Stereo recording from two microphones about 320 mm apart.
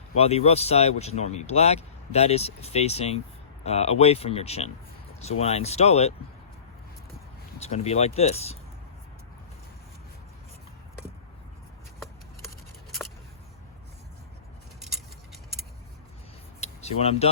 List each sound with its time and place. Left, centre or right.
0.2 s speech: centre
7.6 s speech: centre
16.6 s a sound: centre